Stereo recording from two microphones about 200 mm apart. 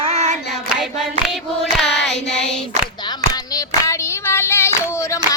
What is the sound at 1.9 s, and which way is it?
Child singing, 60° left (ahead or behind).